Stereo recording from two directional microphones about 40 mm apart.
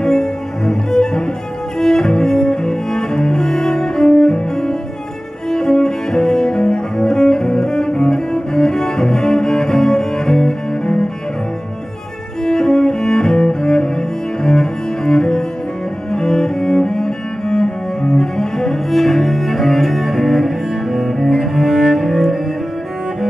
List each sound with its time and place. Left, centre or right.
0.0 s cello: centre
12.4 s cello: centre